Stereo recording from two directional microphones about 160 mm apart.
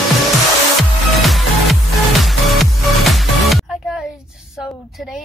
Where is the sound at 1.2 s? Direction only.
Centre (ahead or behind).